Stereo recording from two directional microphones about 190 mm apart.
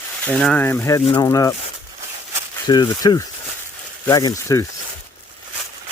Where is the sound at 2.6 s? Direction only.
20° left (ahead or behind).